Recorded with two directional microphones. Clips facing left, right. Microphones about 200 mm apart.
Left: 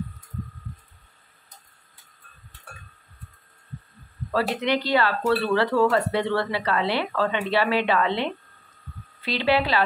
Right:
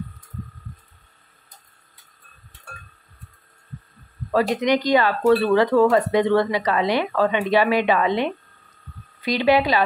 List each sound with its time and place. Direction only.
4.3 s speech: 15° right (ahead or behind)